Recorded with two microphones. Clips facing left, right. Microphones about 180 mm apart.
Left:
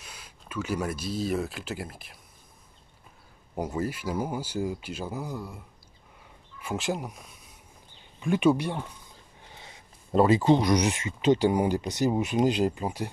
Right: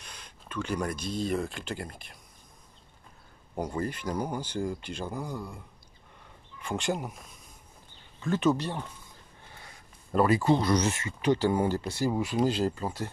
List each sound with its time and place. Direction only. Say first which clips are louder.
0.0 s speech: even; 5° left (ahead or behind)
3.5 s speech: left 2 dB; 5° left (ahead or behind)
6.6 s speech: even; 5° left (ahead or behind)
8.2 s speech: left 3 dB; 15° left (ahead or behind)
9.5 s speech: left 3 dB; 20° left (ahead or behind)